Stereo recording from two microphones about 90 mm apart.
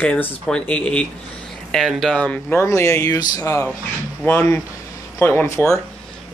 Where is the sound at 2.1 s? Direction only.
10° left (ahead or behind).